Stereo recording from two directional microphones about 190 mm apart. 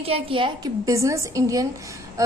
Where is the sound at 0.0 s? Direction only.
30° right (ahead or behind).